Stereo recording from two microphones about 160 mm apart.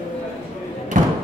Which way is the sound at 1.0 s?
55° right (ahead or behind).